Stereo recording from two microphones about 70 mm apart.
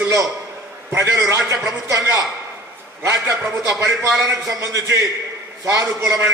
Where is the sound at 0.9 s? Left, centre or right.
Right.